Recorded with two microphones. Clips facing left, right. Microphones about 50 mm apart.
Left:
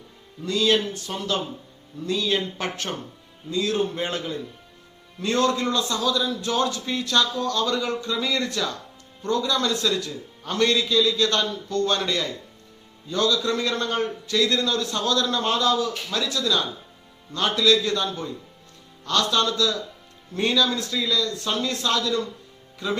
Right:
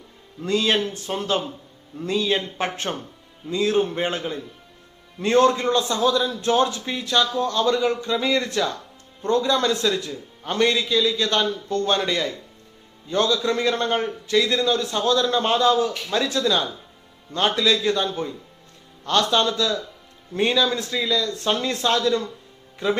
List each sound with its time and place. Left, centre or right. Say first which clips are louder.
0.4 s a man's voice: even; right; by 12.3 s centre
13.1 s a man's voice: right 2 dB; right